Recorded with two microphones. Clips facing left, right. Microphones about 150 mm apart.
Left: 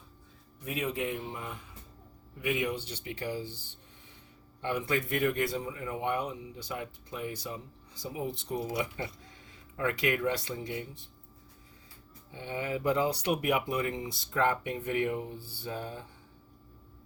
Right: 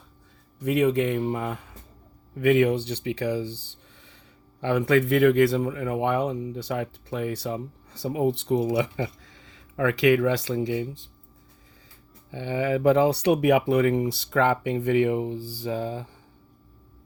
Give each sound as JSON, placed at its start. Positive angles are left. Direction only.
{"t": 0.6, "sound": "speech", "side_deg": -75}
{"t": 4.6, "sound": "speech", "side_deg": -80}
{"t": 12.3, "sound": "speech", "side_deg": -90}